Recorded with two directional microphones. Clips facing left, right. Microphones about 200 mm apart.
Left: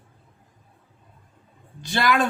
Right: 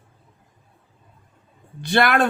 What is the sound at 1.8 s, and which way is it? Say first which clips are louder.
Speech: right 3 dB; 60° right (ahead or behind).